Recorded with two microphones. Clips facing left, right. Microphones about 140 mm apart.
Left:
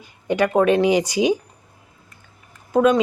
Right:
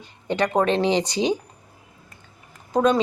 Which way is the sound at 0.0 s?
10° left (ahead or behind).